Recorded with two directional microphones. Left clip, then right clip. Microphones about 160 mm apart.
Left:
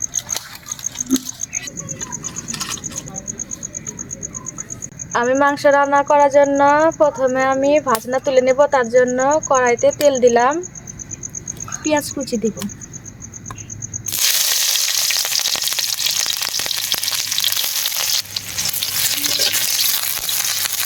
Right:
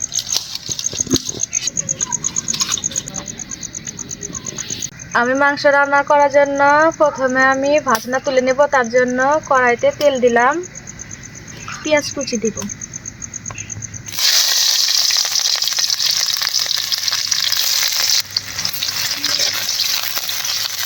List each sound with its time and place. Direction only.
1.7 s insect: 5° left (ahead or behind)
4.5 s frog: 40° left (ahead or behind)
5.4 s speech: 30° left (ahead or behind)
7.8 s speech: 20° left (ahead or behind)
8.1 s speech: 35° left (ahead or behind)
9.6 s speech: 35° left (ahead or behind)
11.7 s speech: 50° left (ahead or behind)
14.3 s water: 35° left (ahead or behind)
18.3 s frying: 40° left (ahead or behind)